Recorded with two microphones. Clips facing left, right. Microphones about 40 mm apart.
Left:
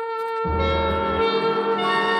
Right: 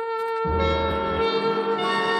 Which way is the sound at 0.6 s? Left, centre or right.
Centre.